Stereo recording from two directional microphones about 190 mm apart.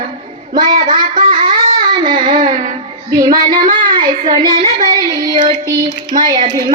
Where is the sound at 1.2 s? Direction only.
40° right (ahead or behind).